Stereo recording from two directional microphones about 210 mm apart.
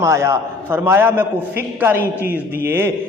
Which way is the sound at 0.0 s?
15° right (ahead or behind).